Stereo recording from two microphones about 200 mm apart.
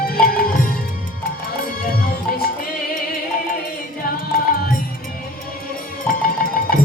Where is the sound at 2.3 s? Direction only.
45° left (ahead or behind).